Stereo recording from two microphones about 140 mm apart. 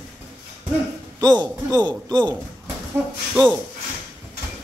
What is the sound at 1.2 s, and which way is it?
A man's voice, 30° right (ahead or behind).